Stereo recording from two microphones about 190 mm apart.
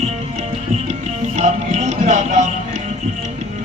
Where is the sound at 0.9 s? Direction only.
40° right (ahead or behind).